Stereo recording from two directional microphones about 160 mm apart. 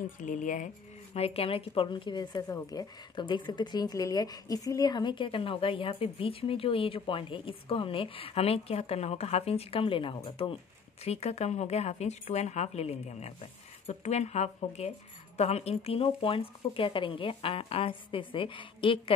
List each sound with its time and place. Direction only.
0.0 s speech: 55° left (ahead or behind)
1.1 s a woman's voice: 40° left (ahead or behind)